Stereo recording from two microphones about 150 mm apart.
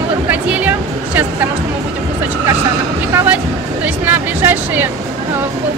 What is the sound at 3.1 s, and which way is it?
Speech, 15° right (ahead or behind).